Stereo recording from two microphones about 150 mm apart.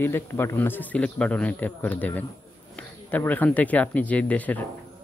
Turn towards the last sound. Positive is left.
turn(degrees=10)  # may be behind; listen again after turning